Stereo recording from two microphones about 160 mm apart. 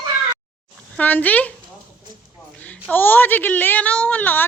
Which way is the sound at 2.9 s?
10° left (ahead or behind).